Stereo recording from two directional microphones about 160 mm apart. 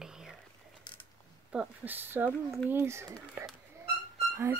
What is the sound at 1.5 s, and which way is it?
Speech, 10° right (ahead or behind).